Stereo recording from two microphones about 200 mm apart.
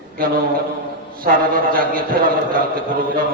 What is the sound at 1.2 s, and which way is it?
A man's voice, 45° right (ahead or behind).